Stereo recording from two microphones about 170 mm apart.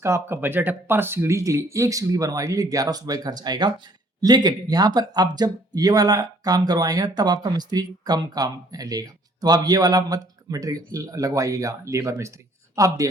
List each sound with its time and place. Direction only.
0.0 s speech: 15° right (ahead or behind)